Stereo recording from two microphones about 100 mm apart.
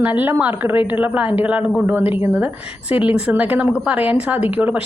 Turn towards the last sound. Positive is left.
turn(degrees=-15)  # may be behind; listen again after turning